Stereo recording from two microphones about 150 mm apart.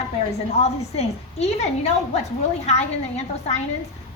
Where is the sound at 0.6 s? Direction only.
45° left (ahead or behind).